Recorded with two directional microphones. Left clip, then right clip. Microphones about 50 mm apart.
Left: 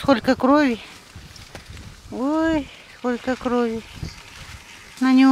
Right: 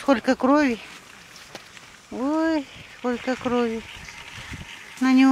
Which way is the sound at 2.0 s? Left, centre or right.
Left.